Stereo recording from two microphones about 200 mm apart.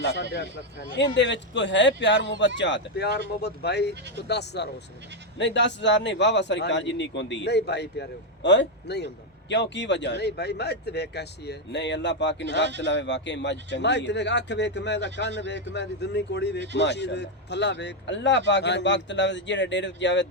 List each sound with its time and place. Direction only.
0.0 s speech: 60° left (ahead or behind)